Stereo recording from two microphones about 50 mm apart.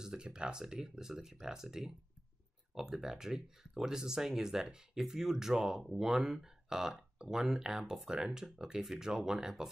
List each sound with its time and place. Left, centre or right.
0.0 s speech: centre